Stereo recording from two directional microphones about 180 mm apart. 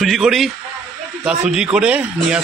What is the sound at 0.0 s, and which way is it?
A man's voice, centre (ahead or behind).